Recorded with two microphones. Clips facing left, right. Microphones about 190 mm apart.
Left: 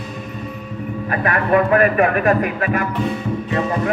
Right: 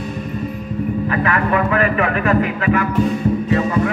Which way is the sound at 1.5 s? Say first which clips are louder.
Left 7 dB; 45° left (ahead or behind).